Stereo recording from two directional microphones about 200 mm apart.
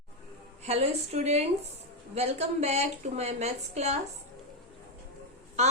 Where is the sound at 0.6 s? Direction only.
30° right (ahead or behind).